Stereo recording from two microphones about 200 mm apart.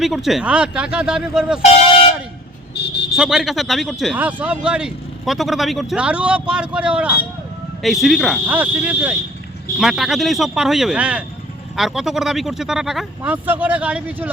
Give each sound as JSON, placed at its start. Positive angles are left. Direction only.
{"t": 0.0, "sound": "speech", "side_deg": 0}
{"t": 2.7, "sound": "vehicle", "side_deg": 55}
{"t": 3.2, "sound": "speech", "side_deg": 0}